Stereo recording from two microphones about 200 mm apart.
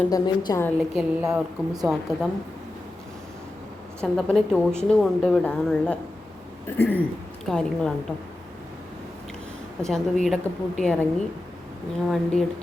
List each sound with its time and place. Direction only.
0.1 s a woman's voice: 15° left (ahead or behind)
1.2 s a woman's voice: 15° right (ahead or behind)
1.8 s speech: centre (ahead or behind)
4.0 s a woman's voice: centre (ahead or behind)
9.8 s speech: centre (ahead or behind)
12.0 s speech: centre (ahead or behind)